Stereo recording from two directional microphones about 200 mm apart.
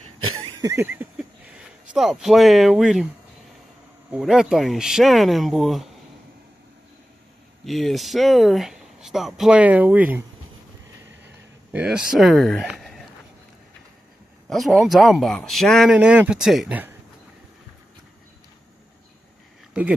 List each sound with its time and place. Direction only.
0.0 s a sound: 90° right
0.6 s a sound: 15° right (ahead or behind)
1.9 s speech: centre (ahead or behind)
4.1 s speech: 5° right (ahead or behind)
7.6 s speech: centre (ahead or behind)
11.7 s speech: 5° right (ahead or behind)
14.5 s speech: centre (ahead or behind)
19.7 s speech: 5° right (ahead or behind)